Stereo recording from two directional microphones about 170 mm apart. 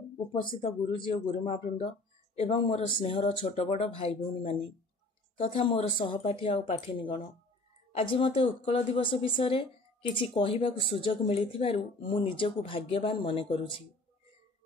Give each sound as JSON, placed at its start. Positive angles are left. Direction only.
{"t": 0.3, "sound": "speech", "side_deg": 30}
{"t": 5.4, "sound": "speech", "side_deg": 35}